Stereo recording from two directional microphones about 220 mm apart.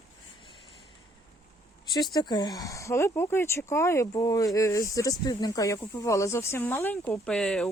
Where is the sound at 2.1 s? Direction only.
20° left (ahead or behind).